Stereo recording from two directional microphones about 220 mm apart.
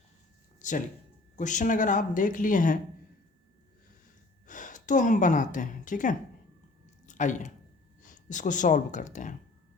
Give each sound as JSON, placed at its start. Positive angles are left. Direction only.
{"t": 0.6, "sound": "a sound", "side_deg": 35}
{"t": 1.4, "sound": "a woman's voice", "side_deg": 35}
{"t": 4.4, "sound": "a woman's voice", "side_deg": 35}